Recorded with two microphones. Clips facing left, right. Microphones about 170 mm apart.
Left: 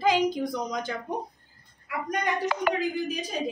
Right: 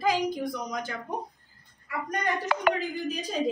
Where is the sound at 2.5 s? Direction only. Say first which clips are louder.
Even; 65° right (ahead or behind).